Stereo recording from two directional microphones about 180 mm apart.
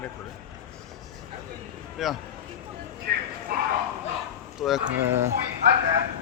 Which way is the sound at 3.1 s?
65° right (ahead or behind).